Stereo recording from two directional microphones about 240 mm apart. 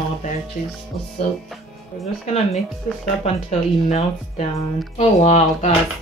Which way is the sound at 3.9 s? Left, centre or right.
Left.